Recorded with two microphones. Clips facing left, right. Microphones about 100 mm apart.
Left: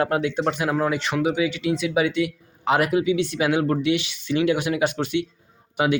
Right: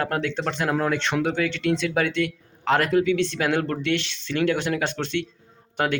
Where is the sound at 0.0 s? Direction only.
15° left (ahead or behind).